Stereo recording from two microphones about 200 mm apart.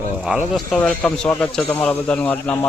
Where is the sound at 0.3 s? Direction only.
Centre (ahead or behind).